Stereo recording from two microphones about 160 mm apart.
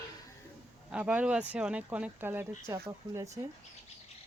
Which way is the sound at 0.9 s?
5° right (ahead or behind).